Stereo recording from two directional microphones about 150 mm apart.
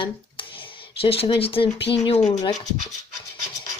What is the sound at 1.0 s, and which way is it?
Speech, 35° left (ahead or behind).